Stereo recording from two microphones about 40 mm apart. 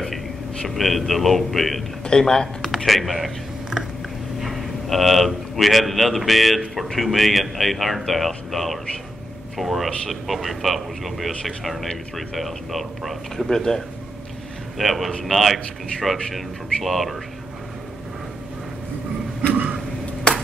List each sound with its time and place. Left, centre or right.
0.7 s speech: centre
2.0 s speech: centre
2.9 s speech: centre
4.4 s a man's voice: centre
13.5 s a man's voice: centre
14.8 s speech: centre
19.5 s a sound: right